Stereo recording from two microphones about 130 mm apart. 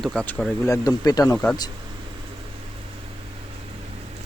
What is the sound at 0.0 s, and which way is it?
Speech, 5° left (ahead or behind).